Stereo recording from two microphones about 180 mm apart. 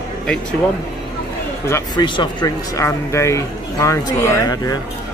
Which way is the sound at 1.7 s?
25° left (ahead or behind).